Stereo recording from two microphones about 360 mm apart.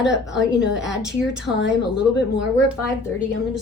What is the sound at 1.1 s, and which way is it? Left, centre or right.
Speech, centre.